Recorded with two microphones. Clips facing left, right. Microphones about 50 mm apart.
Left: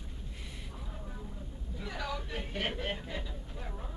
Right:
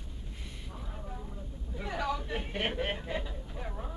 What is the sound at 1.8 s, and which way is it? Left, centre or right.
Speech, right.